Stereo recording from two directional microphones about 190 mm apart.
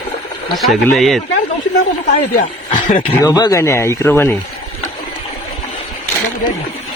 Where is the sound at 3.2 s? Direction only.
20° left (ahead or behind).